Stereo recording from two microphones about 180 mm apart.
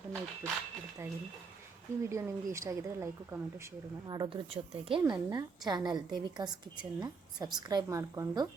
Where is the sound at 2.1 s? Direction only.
15° right (ahead or behind).